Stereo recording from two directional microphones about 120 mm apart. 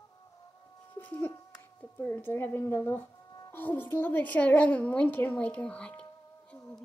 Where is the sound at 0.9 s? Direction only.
15° left (ahead or behind).